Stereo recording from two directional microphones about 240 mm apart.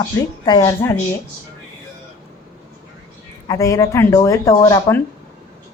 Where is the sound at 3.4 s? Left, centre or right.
Centre.